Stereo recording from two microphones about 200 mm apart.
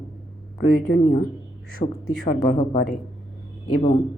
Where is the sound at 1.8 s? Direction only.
30° left (ahead or behind).